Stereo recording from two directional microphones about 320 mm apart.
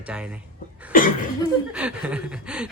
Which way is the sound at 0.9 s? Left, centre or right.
Left.